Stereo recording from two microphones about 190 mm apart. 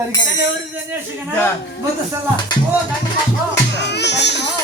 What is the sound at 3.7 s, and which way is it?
Speech, 65° left (ahead or behind).